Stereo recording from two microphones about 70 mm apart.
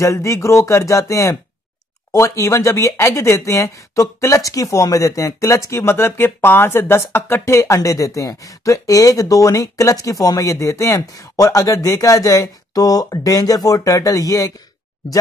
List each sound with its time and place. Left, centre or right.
0.0 s speech: left